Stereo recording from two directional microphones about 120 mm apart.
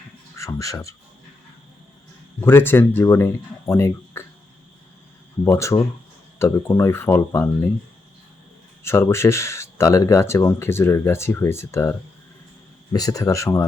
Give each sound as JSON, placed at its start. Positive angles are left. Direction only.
{"t": 0.3, "sound": "speech", "side_deg": 25}
{"t": 2.4, "sound": "speech", "side_deg": 20}
{"t": 5.5, "sound": "speech", "side_deg": 25}
{"t": 8.8, "sound": "speech", "side_deg": 20}